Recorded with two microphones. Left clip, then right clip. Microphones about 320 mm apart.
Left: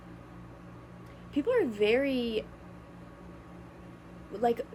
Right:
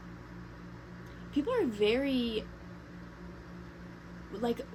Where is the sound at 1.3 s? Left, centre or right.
Centre.